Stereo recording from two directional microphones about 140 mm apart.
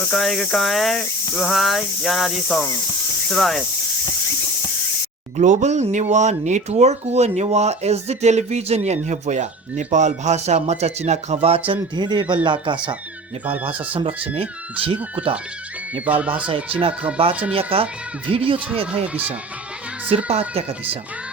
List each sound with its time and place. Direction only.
0.1 s cricket: centre (ahead or behind)
5.4 s speech: 60° right (ahead or behind); by 12.8 s 35° right (ahead or behind)
15.1 s speech: 35° right (ahead or behind)
16.0 s speech: 10° right (ahead or behind)
17.2 s speech: 40° right (ahead or behind)
19.0 s speech: 10° right (ahead or behind)
20.1 s speech: 45° right (ahead or behind)